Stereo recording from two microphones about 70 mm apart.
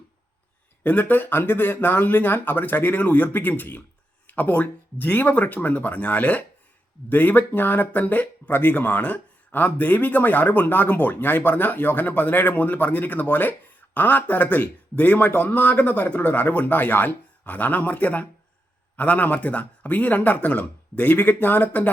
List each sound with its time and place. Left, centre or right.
0.9 s speech: left